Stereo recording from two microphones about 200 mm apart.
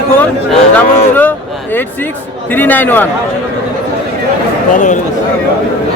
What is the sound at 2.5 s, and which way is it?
Speech, 10° left (ahead or behind).